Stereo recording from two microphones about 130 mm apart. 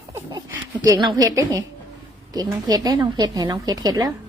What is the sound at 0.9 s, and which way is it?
A woman's voice, 30° right (ahead or behind).